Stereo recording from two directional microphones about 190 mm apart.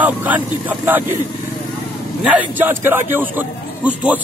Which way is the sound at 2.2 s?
10° right (ahead or behind).